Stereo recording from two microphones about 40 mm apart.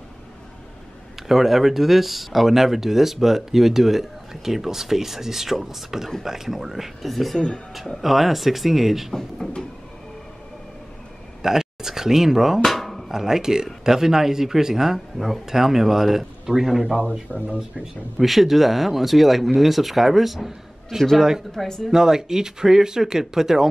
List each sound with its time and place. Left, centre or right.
1.2 s speech: centre
8.0 s speech: centre
11.4 s speech: centre
12.6 s drum: centre
13.1 s speech: centre
15.1 s speech: centre
15.4 s speech: centre
16.9 s speech: centre
21.5 s speech: centre
21.9 s speech: centre